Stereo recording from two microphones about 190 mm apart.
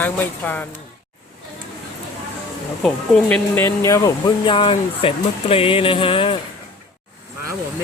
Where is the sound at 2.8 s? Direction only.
Centre (ahead or behind); by 6.4 s 30° left (ahead or behind).